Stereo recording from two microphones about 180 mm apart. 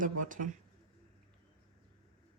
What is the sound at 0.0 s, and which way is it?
Speech, 45° right (ahead or behind).